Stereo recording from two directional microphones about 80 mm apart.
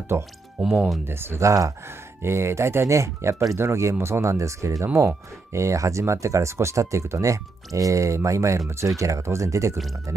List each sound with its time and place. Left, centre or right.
0.1 s speech: right